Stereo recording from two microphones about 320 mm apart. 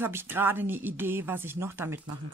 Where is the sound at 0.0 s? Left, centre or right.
Centre.